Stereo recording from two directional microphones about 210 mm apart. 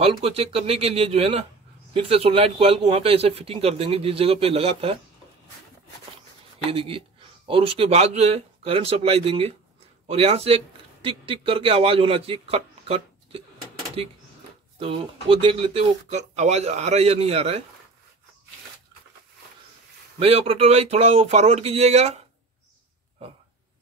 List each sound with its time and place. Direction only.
0.0 s a man's voice: 30° right (ahead or behind)
6.7 s a man's voice: 25° right (ahead or behind)
14.8 s a man's voice: 25° right (ahead or behind)
20.2 s a man's voice: 25° right (ahead or behind)